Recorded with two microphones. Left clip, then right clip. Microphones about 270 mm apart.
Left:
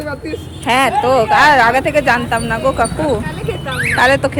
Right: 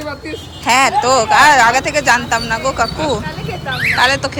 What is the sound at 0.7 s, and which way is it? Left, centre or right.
Speech, centre.